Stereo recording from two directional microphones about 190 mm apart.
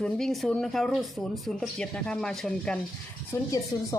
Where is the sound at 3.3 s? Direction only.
15° left (ahead or behind).